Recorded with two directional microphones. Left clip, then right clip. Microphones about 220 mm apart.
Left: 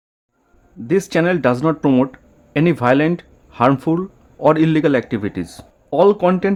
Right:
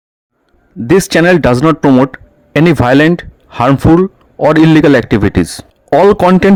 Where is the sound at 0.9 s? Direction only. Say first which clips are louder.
Right 9 dB; 35° right (ahead or behind).